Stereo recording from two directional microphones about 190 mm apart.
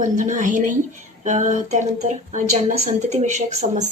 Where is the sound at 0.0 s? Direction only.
40° right (ahead or behind).